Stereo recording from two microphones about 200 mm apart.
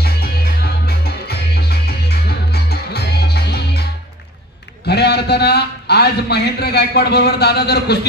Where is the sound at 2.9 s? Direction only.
55° left (ahead or behind).